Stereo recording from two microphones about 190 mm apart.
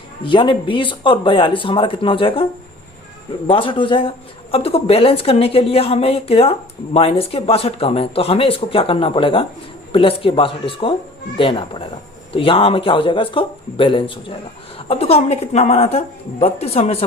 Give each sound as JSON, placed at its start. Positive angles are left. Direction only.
{"t": 0.2, "sound": "a woman's voice", "side_deg": 25}